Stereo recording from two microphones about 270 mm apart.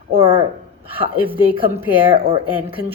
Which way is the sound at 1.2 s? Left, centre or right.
Centre.